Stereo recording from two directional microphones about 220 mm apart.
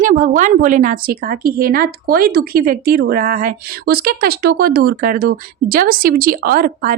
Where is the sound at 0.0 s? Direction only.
35° right (ahead or behind).